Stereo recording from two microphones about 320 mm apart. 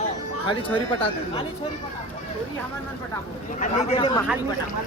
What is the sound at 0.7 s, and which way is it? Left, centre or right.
Speech, centre.